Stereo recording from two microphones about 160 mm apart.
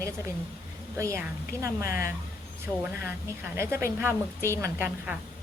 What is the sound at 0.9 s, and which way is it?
A woman's voice, 20° right (ahead or behind).